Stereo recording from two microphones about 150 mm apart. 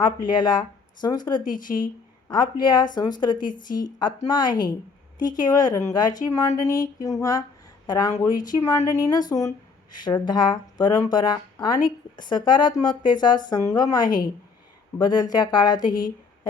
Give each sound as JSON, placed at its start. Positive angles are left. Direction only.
{"t": 0.0, "sound": "speech", "side_deg": 30}
{"t": 1.5, "sound": "speech", "side_deg": 65}
{"t": 2.3, "sound": "speech", "side_deg": 30}
{"t": 3.4, "sound": "speech", "side_deg": 65}
{"t": 3.8, "sound": "speech", "side_deg": 25}